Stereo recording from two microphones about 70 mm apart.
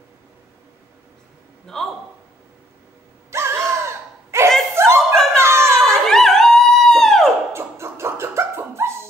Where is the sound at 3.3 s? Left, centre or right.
Right.